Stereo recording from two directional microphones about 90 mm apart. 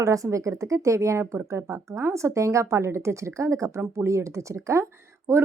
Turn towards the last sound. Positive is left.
turn(degrees=-30)  # may be behind; listen again after turning